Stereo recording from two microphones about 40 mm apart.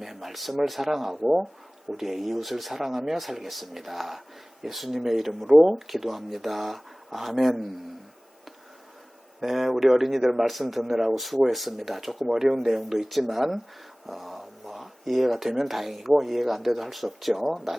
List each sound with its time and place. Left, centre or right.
0.0 s speech: centre
9.4 s speech: centre